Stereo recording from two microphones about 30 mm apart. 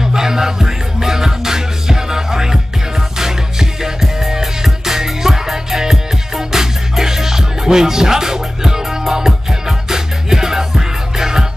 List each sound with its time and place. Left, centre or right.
0.0 s music: centre